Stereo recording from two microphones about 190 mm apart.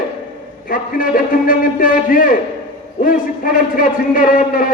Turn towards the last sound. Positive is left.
turn(degrees=45)  # may be behind; listen again after turning